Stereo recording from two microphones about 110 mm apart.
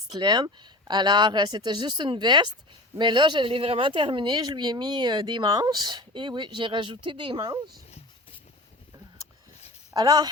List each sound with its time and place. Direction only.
0.1 s speech: 40° right (ahead or behind)
7.9 s a sound: 80° left
9.9 s speech: 35° right (ahead or behind)